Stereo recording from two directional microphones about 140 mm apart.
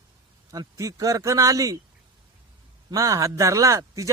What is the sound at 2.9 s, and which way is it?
Speech, 25° right (ahead or behind).